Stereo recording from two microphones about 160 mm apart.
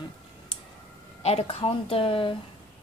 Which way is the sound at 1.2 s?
40° left (ahead or behind).